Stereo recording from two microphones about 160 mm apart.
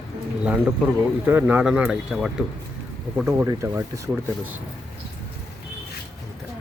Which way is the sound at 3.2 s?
15° right (ahead or behind).